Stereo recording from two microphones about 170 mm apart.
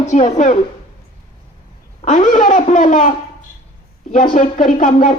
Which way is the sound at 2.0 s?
50° left (ahead or behind).